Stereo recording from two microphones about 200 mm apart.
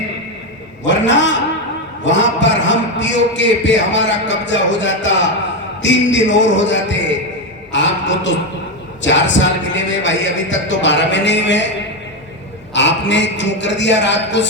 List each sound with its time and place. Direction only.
0.9 s a man's voice: 65° left (ahead or behind)
7.7 s a sound: 65° left (ahead or behind)
9.0 s a man's voice: 65° left (ahead or behind)
12.7 s a man's voice: 65° left (ahead or behind)